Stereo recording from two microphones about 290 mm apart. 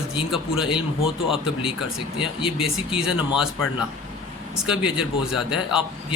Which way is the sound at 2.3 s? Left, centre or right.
Centre.